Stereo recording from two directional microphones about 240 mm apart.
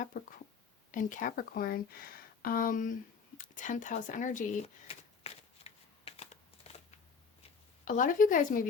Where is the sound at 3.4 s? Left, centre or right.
Left.